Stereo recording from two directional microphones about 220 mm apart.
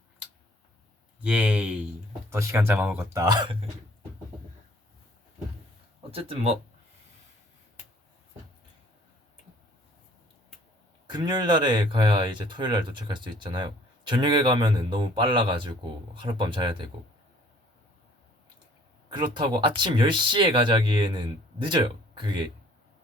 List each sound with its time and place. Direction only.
1.2 s speech: 5° right (ahead or behind); by 3.7 s 25° right (ahead or behind)
6.1 s speech: 25° right (ahead or behind)
11.0 s speech: 20° right (ahead or behind)
19.1 s speech: 20° right (ahead or behind)